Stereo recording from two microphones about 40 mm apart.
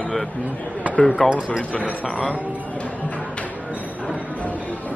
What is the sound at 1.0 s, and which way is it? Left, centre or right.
Speech, centre.